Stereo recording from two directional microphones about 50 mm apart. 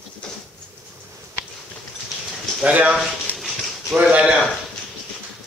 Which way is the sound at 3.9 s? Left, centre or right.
Right.